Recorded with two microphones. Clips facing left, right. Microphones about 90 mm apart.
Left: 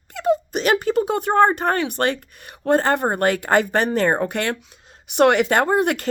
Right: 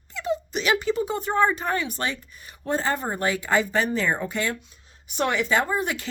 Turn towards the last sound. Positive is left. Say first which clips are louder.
# left 8 dB
turn(degrees=60)  # may be behind; listen again after turning